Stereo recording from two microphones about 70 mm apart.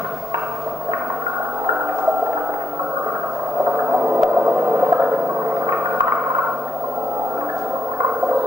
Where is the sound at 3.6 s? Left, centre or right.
Right.